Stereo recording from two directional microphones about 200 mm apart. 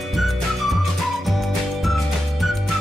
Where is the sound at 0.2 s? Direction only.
Centre (ahead or behind).